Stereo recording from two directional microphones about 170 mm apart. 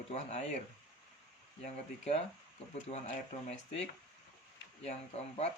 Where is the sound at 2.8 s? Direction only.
40° left (ahead or behind).